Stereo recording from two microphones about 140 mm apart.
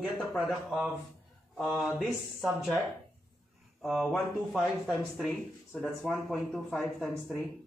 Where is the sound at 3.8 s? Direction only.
5° left (ahead or behind).